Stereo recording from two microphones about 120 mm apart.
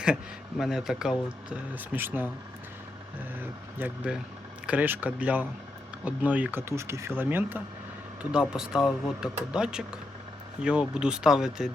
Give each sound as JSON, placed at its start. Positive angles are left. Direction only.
{"t": 0.5, "sound": "speech", "side_deg": -5}
{"t": 3.8, "sound": "speech", "side_deg": -15}